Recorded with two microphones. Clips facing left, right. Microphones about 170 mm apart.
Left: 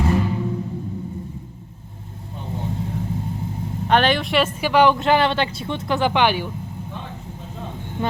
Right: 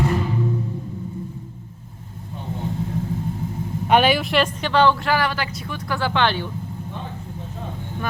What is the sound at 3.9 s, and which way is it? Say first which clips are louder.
Speech: right 1 dB; 10° right (ahead or behind).